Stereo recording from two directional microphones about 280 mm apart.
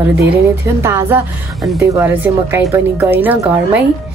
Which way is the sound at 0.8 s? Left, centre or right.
Centre.